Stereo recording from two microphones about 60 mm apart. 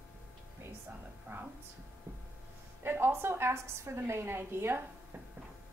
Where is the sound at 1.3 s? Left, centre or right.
Right.